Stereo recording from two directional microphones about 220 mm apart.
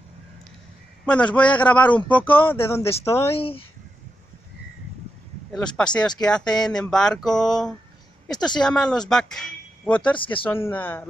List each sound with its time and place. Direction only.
1.0 s speech: 5° left (ahead or behind)
3.3 s speech: 25° left (ahead or behind)
5.9 s speech: 20° left (ahead or behind)
6.2 s speech: 5° left (ahead or behind)
10.1 s speech: 25° left (ahead or behind)
10.4 s speech: 10° left (ahead or behind)